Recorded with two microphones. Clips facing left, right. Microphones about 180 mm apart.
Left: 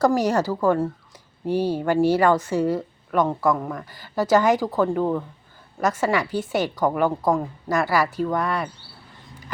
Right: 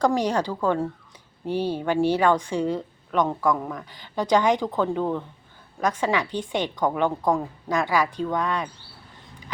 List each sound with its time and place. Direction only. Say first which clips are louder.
0.0 s a woman's voice: left 3 dB; 10° left (ahead or behind)